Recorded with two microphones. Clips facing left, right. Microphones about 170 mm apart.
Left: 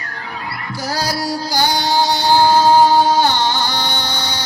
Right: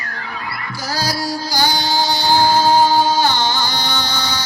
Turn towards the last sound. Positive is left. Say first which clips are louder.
# right 1 dB
turn(degrees=60)  # may be behind; listen again after turning